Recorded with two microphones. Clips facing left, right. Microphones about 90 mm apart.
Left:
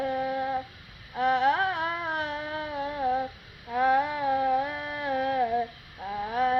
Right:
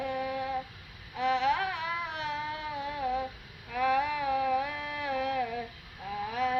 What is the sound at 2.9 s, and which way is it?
Humming, 35° left (ahead or behind).